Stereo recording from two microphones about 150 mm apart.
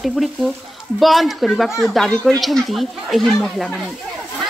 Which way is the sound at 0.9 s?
Centre (ahead or behind).